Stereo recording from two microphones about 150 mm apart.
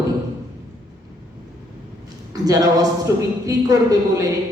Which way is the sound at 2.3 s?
25° right (ahead or behind).